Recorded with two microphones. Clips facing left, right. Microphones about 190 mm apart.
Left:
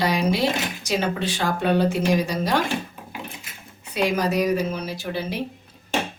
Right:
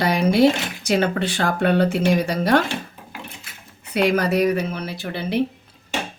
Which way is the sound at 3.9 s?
60° right (ahead or behind).